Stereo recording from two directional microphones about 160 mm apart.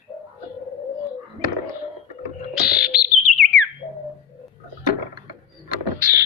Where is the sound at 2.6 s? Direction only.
5° right (ahead or behind).